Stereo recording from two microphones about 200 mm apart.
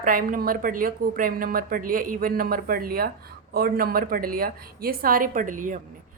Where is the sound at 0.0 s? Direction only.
45° right (ahead or behind).